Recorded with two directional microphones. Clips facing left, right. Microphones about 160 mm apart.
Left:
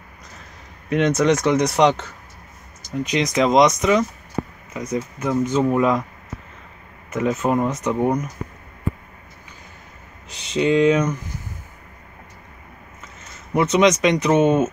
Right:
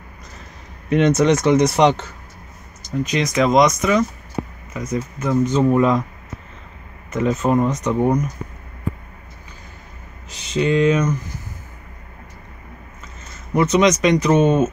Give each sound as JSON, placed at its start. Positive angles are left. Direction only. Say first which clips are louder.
{"t": 0.8, "sound": "speech", "louder": "right 2 dB", "side_deg": 0}
{"t": 3.1, "sound": "speech", "louder": "even", "side_deg": 20}
{"t": 7.1, "sound": "speech", "louder": "right 2 dB", "side_deg": 5}
{"t": 10.6, "sound": "speech", "louder": "even", "side_deg": 15}
{"t": 13.5, "sound": "speech", "louder": "right 1 dB", "side_deg": 15}